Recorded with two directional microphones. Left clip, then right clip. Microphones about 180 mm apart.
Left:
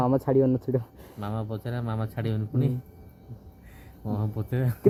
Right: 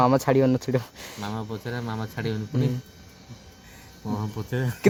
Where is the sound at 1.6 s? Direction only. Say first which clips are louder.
Right 2 dB; 20° left (ahead or behind).